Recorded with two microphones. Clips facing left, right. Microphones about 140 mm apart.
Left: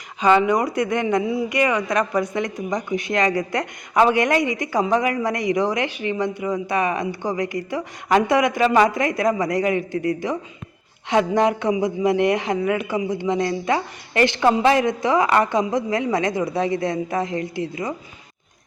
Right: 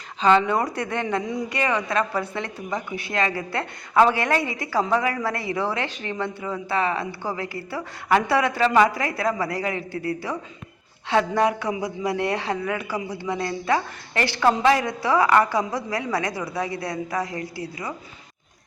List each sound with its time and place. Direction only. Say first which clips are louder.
0.2 s a man's voice: left 2 dB; 15° left (ahead or behind)
11.1 s a man's voice: left 3 dB; 20° left (ahead or behind)